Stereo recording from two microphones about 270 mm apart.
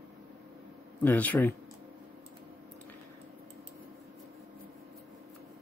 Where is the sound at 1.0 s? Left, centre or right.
Centre.